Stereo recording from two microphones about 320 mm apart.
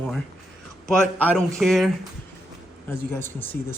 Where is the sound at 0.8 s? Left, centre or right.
Centre.